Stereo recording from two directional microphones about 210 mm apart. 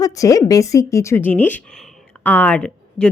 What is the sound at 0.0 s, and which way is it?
Speech, 15° left (ahead or behind).